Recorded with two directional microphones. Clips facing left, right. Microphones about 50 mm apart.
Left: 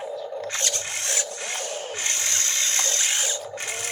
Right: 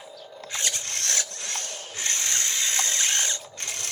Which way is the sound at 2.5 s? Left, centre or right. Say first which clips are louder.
Left 1 dB; centre.